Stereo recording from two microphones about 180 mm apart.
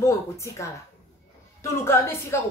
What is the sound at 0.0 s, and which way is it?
A woman's voice, 15° left (ahead or behind).